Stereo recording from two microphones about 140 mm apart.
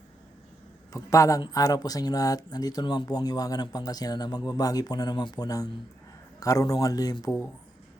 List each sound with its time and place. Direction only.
0.9 s speech: 25° left (ahead or behind)